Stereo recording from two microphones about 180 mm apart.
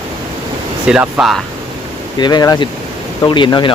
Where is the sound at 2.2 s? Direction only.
25° left (ahead or behind).